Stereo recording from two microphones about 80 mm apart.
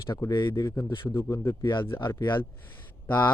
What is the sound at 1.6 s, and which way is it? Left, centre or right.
Speech, left.